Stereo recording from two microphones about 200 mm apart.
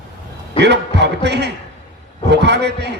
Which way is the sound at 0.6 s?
60° right (ahead or behind).